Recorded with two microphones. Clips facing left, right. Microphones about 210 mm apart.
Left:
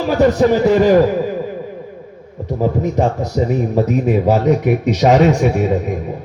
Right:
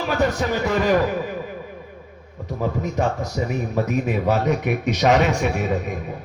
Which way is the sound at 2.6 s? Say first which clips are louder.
Left 7 dB; 40° left (ahead or behind).